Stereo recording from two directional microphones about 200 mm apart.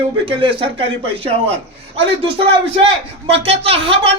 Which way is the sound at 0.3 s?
25° right (ahead or behind).